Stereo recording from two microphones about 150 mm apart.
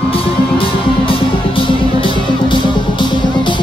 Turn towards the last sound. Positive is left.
turn(degrees=30)  # may be behind; listen again after turning